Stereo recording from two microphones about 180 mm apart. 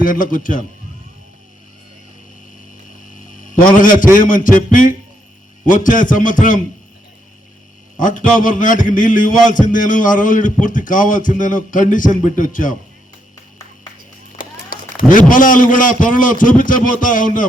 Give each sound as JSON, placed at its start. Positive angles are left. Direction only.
{"t": 0.0, "sound": "a man's voice", "side_deg": 50}
{"t": 3.4, "sound": "a sound", "side_deg": 50}
{"t": 3.8, "sound": "a man's voice", "side_deg": 45}
{"t": 7.9, "sound": "a man's voice", "side_deg": 45}
{"t": 14.3, "sound": "a sound", "side_deg": 50}
{"t": 15.3, "sound": "a man's voice", "side_deg": 45}